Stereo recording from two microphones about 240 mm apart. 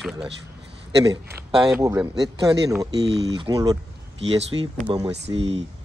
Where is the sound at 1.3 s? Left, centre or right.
Centre.